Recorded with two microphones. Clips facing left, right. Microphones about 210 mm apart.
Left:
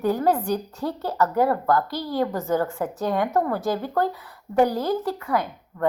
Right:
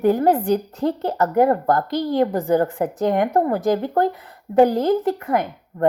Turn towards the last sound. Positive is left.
turn(degrees=-20)  # may be behind; listen again after turning